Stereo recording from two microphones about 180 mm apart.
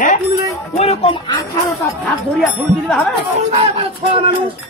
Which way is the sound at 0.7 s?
35° left (ahead or behind).